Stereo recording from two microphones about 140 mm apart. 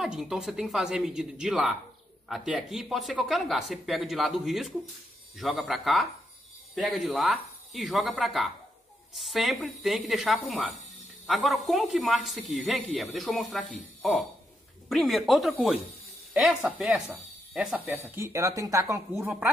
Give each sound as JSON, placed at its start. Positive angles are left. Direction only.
{"t": 0.0, "sound": "speech", "side_deg": -5}
{"t": 14.9, "sound": "speech", "side_deg": 0}
{"t": 18.1, "sound": "speech", "side_deg": -20}